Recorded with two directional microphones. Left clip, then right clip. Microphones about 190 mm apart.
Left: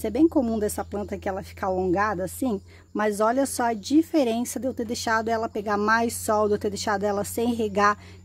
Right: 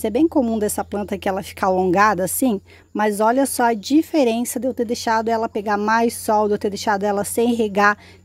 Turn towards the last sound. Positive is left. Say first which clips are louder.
# right 5 dB
turn(degrees=-20)  # may be behind; listen again after turning